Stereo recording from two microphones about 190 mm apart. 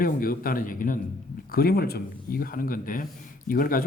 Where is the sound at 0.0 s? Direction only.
50° left (ahead or behind).